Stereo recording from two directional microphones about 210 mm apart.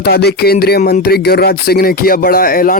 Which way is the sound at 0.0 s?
50° left (ahead or behind).